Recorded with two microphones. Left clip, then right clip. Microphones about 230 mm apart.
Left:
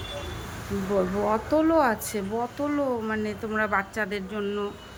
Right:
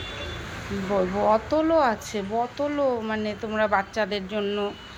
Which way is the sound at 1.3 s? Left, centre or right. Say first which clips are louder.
Right 2 dB; centre.